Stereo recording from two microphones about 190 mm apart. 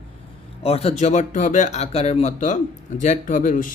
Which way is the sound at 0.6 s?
30° left (ahead or behind).